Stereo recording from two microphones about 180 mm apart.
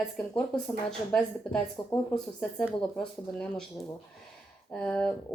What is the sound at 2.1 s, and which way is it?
Speech, 5° left (ahead or behind).